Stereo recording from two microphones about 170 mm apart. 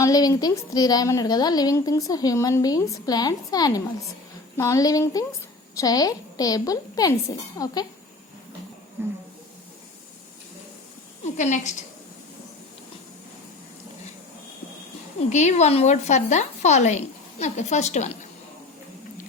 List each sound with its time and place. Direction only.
0.0 s a woman's voice: 20° left (ahead or behind)
9.0 s speech: 15° right (ahead or behind)
11.3 s a woman's voice: 45° left (ahead or behind)
15.3 s a woman's voice: 45° left (ahead or behind)